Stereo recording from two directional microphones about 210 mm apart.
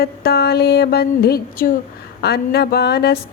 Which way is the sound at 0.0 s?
50° left (ahead or behind).